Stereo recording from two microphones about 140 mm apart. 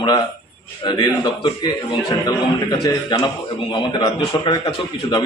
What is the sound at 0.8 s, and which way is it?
A man's voice, 30° left (ahead or behind).